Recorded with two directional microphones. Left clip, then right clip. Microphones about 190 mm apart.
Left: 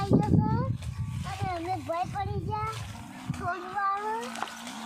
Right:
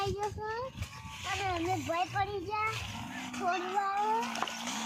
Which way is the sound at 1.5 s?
Centre (ahead or behind).